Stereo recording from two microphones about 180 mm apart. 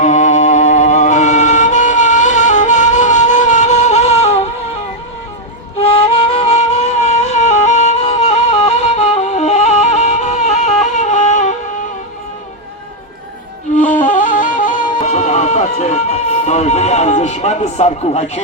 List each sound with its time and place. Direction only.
0.0 s music: 40° left (ahead or behind)
5.8 s flute: 30° left (ahead or behind)
13.7 s music: 45° left (ahead or behind)
15.0 s a sound: 40° left (ahead or behind)